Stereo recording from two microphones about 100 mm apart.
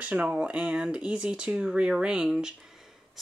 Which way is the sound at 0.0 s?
15° right (ahead or behind).